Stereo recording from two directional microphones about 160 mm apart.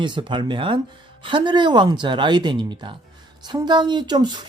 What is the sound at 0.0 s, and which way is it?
Speech, 30° right (ahead or behind).